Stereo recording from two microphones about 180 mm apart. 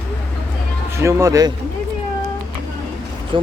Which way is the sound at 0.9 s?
15° right (ahead or behind).